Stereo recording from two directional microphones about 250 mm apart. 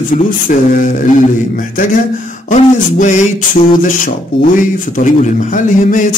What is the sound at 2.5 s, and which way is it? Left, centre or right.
Speech, left.